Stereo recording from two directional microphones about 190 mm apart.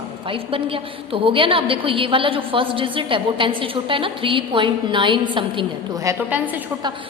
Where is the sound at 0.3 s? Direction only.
30° right (ahead or behind).